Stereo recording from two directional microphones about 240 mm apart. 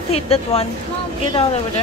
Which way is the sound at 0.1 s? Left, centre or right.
Left.